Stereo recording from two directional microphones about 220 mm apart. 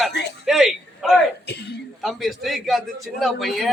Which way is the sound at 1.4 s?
50° left (ahead or behind).